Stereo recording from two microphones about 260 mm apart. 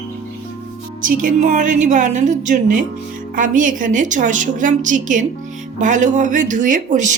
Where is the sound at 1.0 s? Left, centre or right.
Right.